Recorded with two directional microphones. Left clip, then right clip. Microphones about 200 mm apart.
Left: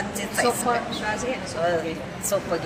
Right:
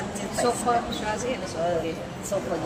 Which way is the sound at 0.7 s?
45° left (ahead or behind).